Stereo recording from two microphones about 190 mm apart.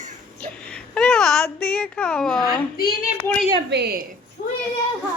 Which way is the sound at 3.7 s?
60° right (ahead or behind).